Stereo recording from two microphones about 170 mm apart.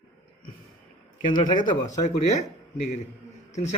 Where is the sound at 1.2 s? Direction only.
25° left (ahead or behind).